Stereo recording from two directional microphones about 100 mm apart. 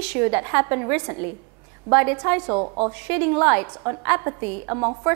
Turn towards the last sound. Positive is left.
turn(degrees=-20)  # may be behind; listen again after turning